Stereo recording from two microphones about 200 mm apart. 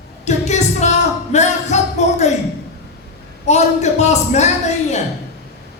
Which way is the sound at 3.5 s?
35° left (ahead or behind).